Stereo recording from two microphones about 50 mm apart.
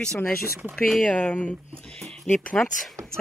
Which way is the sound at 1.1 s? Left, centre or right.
Left.